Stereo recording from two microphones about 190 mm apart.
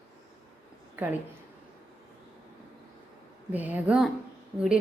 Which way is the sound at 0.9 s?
10° right (ahead or behind).